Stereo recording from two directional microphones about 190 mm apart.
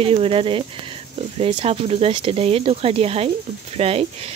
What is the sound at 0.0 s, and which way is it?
Speech, 30° right (ahead or behind).